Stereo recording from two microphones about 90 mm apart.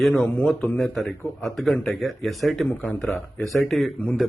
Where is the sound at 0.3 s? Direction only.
15° left (ahead or behind).